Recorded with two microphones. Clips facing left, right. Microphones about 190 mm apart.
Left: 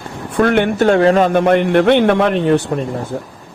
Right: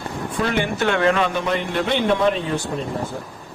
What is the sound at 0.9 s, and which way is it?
Speech, 35° left (ahead or behind).